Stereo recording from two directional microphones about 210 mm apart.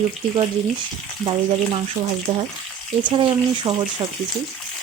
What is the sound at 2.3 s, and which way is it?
A woman's voice, 20° right (ahead or behind).